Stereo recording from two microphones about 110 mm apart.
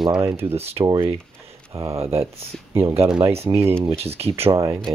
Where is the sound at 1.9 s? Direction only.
65° right (ahead or behind).